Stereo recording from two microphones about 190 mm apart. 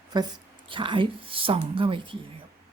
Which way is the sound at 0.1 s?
20° right (ahead or behind).